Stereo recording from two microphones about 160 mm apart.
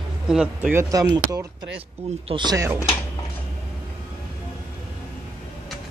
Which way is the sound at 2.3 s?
30° right (ahead or behind).